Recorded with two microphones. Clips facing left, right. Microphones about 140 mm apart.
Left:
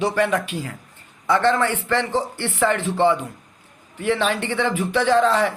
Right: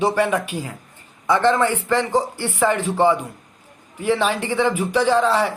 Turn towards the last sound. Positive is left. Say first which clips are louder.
# even
turn(degrees=-10)  # may be behind; listen again after turning